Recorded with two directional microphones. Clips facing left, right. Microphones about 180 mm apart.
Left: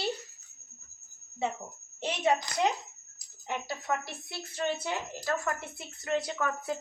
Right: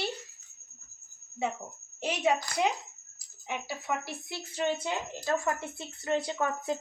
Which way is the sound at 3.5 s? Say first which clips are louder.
Left 1 dB; 5° right (ahead or behind).